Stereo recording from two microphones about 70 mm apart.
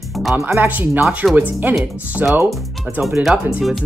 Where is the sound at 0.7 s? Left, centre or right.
Right.